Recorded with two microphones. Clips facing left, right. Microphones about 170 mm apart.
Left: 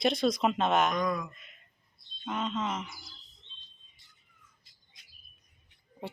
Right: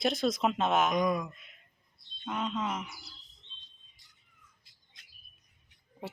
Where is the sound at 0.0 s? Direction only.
5° right (ahead or behind).